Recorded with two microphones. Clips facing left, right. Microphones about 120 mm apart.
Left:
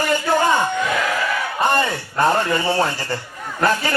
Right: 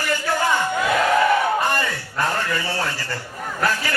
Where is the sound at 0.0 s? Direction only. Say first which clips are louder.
Left 4 dB; 20° left (ahead or behind).